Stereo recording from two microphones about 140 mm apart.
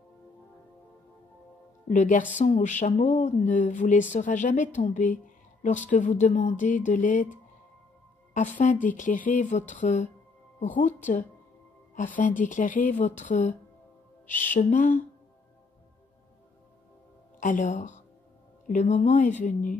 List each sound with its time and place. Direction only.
1.9 s a woman's voice: 65° left (ahead or behind)
14.5 s speech: 65° left (ahead or behind)
17.4 s speech: 65° left (ahead or behind)